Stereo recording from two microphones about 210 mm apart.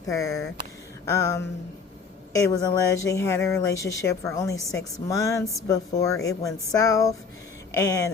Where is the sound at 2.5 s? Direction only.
15° left (ahead or behind).